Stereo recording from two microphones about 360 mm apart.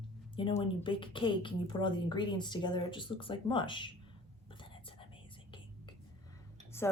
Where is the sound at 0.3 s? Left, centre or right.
Centre.